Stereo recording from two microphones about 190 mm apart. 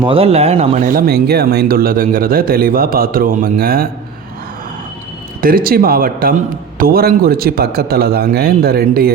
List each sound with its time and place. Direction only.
0.0 s speech: 30° right (ahead or behind)
0.9 s speech: 50° right (ahead or behind)
5.4 s speech: 50° right (ahead or behind)